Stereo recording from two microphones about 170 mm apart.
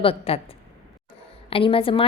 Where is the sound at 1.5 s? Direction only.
35° left (ahead or behind).